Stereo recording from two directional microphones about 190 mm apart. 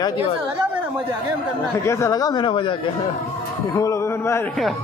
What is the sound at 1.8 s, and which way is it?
Speech, 15° left (ahead or behind).